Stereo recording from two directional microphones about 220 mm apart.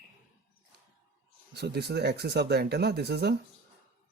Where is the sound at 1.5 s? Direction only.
50° right (ahead or behind).